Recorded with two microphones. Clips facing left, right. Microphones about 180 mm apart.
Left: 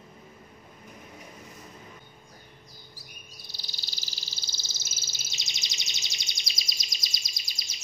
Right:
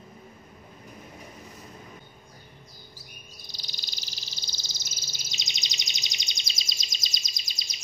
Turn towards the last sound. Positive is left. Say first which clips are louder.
# right 2 dB
turn(degrees=-20)  # may be behind; listen again after turning